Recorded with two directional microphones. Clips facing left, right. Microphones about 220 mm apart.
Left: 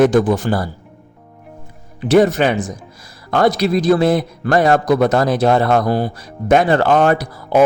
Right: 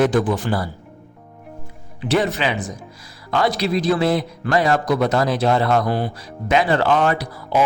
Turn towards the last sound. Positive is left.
turn(degrees=45)  # may be behind; listen again after turning